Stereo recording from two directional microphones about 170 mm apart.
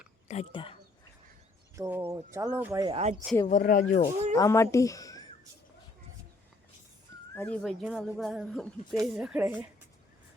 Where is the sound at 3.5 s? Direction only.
50° left (ahead or behind).